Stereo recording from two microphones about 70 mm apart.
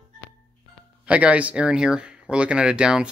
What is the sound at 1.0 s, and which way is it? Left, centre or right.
Speech, centre.